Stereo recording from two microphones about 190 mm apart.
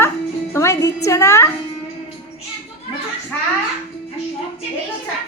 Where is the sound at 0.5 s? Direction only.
15° left (ahead or behind).